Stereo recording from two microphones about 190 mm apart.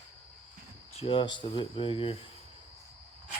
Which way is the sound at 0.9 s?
30° left (ahead or behind).